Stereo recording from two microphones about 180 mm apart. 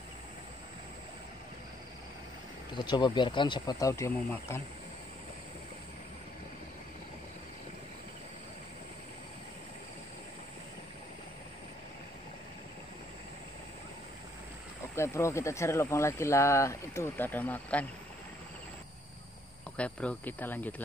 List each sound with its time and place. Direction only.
2.7 s speech: 25° left (ahead or behind)
15.0 s speech: 15° left (ahead or behind)
19.8 s speech: 5° left (ahead or behind)